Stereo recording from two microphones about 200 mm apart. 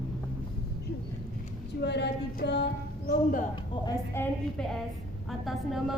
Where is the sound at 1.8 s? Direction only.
55° left (ahead or behind).